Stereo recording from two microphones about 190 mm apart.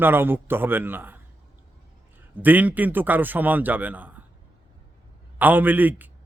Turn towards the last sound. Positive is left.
turn(degrees=-10)  # may be behind; listen again after turning